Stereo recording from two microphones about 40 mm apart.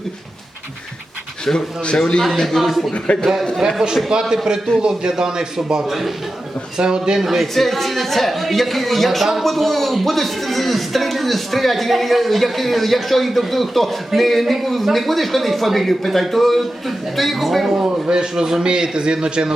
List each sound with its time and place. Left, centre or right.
1.5 s a man's voice: left
2.6 s speech: centre
2.9 s speech: left
3.8 s a man's voice: centre
5.9 s speech: centre
6.7 s a man's voice: centre
7.5 s speech: centre
17.7 s a man's voice: right